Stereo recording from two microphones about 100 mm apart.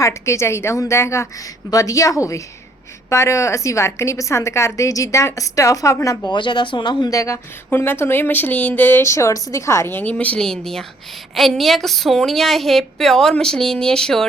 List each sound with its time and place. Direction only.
0.0 s a woman's voice: 30° left (ahead or behind)
6.3 s speech: 55° left (ahead or behind)
7.1 s a woman's voice: 30° left (ahead or behind); by 14.3 s 5° left (ahead or behind)